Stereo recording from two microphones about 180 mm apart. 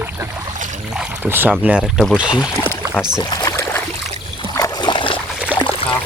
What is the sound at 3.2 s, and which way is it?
Rowboat, 20° left (ahead or behind).